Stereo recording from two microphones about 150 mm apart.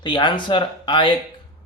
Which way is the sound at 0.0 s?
30° left (ahead or behind).